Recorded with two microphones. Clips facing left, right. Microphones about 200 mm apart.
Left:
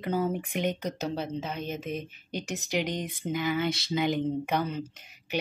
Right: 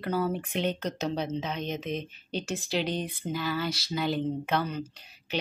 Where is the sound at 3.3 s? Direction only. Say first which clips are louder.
Left 3 dB; 20° left (ahead or behind).